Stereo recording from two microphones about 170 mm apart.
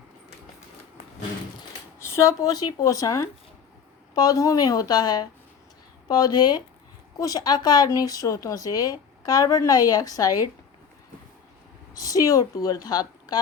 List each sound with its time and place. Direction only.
2.0 s speech: 15° left (ahead or behind)
11.9 s speech: 20° left (ahead or behind)